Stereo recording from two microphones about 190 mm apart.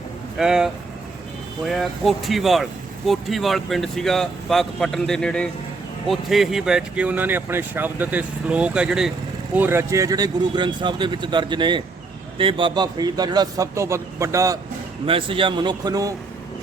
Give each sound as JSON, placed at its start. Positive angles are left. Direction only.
{"t": 0.3, "sound": "speech", "side_deg": -5}
{"t": 15.0, "sound": "speech", "side_deg": -30}